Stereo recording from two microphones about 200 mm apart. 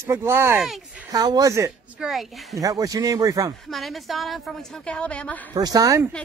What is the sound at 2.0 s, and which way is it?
Speech, centre (ahead or behind).